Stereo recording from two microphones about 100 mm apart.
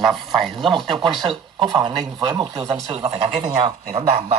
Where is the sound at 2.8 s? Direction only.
65° right (ahead or behind).